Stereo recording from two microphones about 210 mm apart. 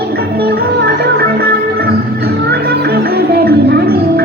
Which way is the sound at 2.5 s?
45° right (ahead or behind).